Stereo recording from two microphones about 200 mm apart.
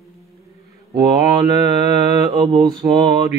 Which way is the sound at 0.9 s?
20° right (ahead or behind).